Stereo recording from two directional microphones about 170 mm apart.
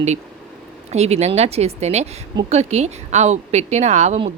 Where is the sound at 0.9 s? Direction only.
40° right (ahead or behind).